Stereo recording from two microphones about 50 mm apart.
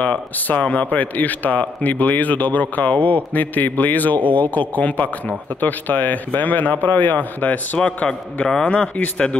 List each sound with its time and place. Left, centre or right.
0.5 s speech: left
8.6 s speech: left